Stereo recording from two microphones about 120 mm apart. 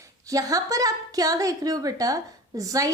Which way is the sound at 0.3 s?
30° right (ahead or behind).